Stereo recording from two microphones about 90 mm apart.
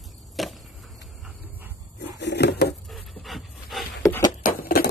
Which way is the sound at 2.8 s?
Centre (ahead or behind).